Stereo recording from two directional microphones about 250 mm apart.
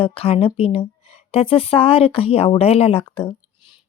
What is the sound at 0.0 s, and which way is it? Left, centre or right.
Speech, left.